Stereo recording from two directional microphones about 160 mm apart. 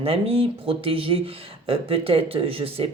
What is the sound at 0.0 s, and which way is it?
Speech, 35° right (ahead or behind).